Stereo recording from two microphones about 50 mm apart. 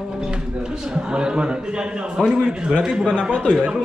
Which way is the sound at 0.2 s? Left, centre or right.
Centre.